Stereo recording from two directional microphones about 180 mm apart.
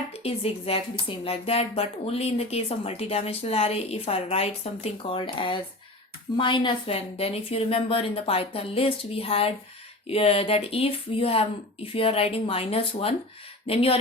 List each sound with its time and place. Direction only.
0.1 s speech: 35° left (ahead or behind)